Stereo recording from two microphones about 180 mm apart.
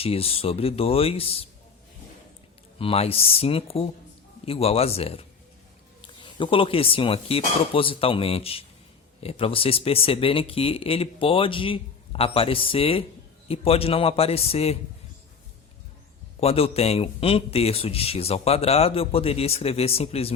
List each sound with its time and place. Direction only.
0.0 s a man's voice: 30° left (ahead or behind)
2.7 s a man's voice: 30° left (ahead or behind)
16.4 s a man's voice: 35° left (ahead or behind)